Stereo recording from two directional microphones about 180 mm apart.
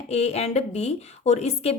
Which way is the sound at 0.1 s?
35° left (ahead or behind).